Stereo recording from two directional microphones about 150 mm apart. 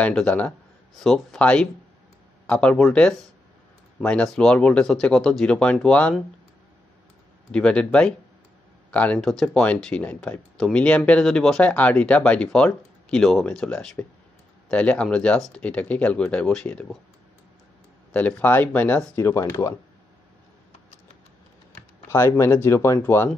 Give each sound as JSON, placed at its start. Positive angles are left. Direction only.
{"t": 0.0, "sound": "speech", "side_deg": 5}
{"t": 7.5, "sound": "speech", "side_deg": 5}
{"t": 18.1, "sound": "speech", "side_deg": 10}
{"t": 22.0, "sound": "speech", "side_deg": 20}